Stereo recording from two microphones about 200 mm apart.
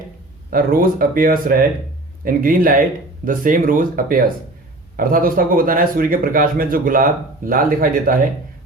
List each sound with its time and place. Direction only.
0.5 s speech: 45° right (ahead or behind)